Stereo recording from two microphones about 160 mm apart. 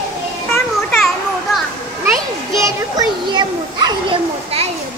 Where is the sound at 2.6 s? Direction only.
20° right (ahead or behind).